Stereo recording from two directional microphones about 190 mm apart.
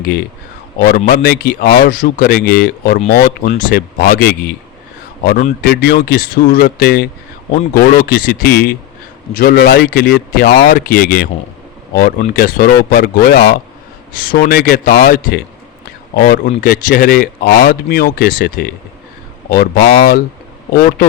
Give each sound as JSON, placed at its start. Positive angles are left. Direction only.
{"t": 0.0, "sound": "speech", "side_deg": 55}